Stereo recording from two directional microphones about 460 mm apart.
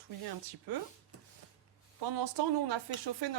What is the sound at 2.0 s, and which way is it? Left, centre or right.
Speech, right.